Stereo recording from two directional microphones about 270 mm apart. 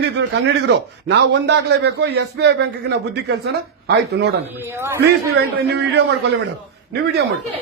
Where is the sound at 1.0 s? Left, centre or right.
Right.